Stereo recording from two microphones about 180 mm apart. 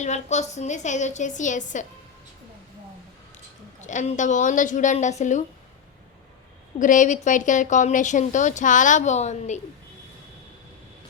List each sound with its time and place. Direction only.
0.0 s a woman's voice: 40° left (ahead or behind)
3.8 s a woman's voice: 45° left (ahead or behind)
6.7 s a woman's voice: 45° left (ahead or behind)